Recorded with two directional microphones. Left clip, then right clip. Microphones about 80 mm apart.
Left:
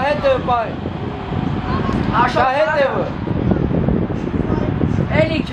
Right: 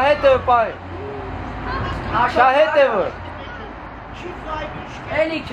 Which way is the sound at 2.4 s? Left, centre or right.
Right.